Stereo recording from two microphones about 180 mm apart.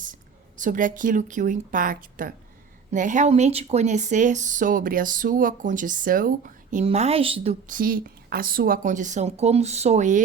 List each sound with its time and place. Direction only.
0.0 s a woman's voice: 45° right (ahead or behind)
7.7 s speech: 50° right (ahead or behind)